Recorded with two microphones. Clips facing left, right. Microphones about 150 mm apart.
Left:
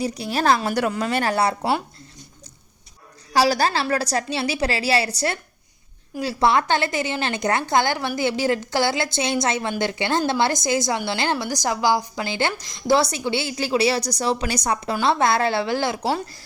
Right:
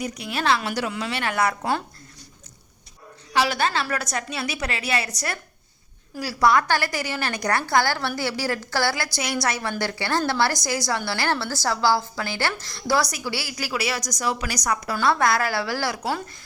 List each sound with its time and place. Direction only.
0.0 s a woman's voice: 30° left (ahead or behind)
3.3 s a woman's voice: 35° left (ahead or behind)